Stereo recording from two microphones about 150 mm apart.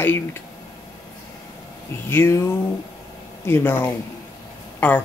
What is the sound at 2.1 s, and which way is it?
Speech, 15° left (ahead or behind).